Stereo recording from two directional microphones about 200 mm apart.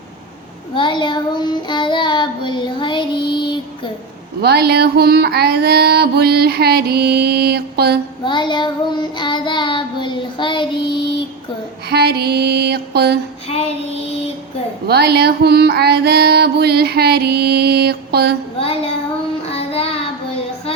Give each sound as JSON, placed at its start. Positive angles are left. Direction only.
{"t": 0.8, "sound": "child singing", "side_deg": 25}
{"t": 4.4, "sound": "a sound", "side_deg": -55}
{"t": 8.2, "sound": "child singing", "side_deg": 25}
{"t": 11.9, "sound": "mantra", "side_deg": -55}
{"t": 14.8, "sound": "a sound", "side_deg": -55}
{"t": 19.5, "sound": "child singing", "side_deg": 30}